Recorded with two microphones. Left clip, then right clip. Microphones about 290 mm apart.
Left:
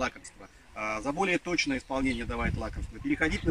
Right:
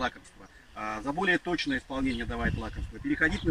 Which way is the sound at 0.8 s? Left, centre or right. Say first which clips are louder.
Left 2 dB; centre.